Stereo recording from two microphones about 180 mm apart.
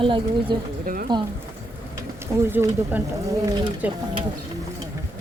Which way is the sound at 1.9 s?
15° right (ahead or behind).